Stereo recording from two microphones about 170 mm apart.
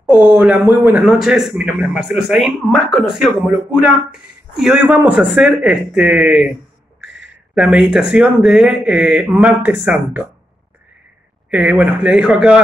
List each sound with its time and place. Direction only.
0.0 s a man's voice: 10° right (ahead or behind)
11.5 s a man's voice: 5° right (ahead or behind)